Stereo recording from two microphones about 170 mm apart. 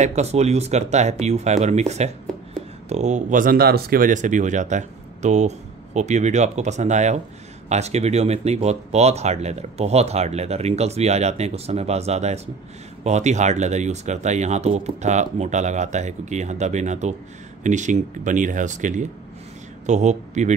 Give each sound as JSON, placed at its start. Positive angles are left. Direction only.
{"t": 0.0, "sound": "speech", "side_deg": -40}